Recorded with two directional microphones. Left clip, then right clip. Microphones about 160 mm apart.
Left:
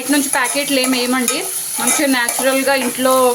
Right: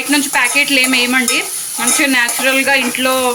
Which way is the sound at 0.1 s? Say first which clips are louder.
Right 3 dB; 30° left (ahead or behind).